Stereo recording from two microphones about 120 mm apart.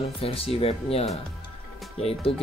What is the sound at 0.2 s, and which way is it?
Speech, 55° left (ahead or behind).